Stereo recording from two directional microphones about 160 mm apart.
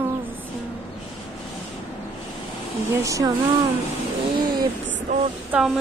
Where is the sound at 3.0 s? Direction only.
20° right (ahead or behind).